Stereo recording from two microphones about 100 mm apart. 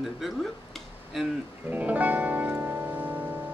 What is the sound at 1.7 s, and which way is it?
Music, 15° right (ahead or behind).